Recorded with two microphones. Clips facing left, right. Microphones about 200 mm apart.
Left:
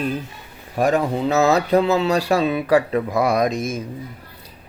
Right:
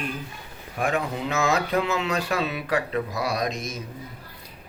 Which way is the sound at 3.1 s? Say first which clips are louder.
Left 8 dB; 50° left (ahead or behind).